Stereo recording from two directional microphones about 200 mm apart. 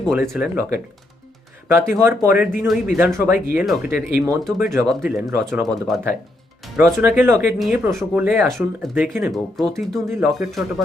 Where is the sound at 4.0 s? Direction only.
15° right (ahead or behind).